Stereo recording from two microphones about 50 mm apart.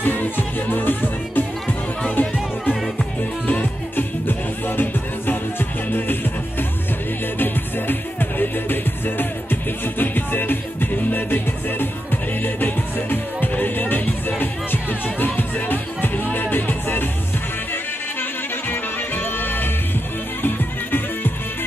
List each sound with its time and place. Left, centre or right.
0.0 s music: left
7.3 s music: left
18.7 s music: left